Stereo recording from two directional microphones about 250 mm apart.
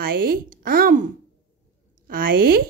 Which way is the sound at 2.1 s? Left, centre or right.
Right.